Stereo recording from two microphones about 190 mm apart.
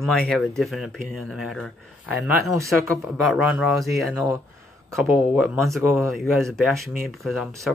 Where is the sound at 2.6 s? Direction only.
15° right (ahead or behind).